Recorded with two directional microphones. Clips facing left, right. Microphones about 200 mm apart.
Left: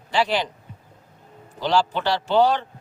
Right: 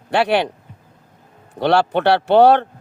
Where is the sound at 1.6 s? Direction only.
65° right (ahead or behind).